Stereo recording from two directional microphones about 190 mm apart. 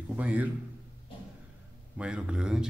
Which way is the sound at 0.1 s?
10° right (ahead or behind).